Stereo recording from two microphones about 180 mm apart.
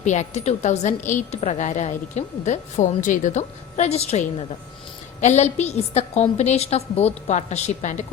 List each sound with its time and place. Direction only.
0.0 s a woman's voice: 40° left (ahead or behind)